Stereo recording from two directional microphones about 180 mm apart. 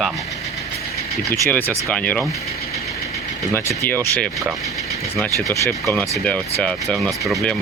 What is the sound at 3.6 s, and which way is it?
Speech, 10° left (ahead or behind).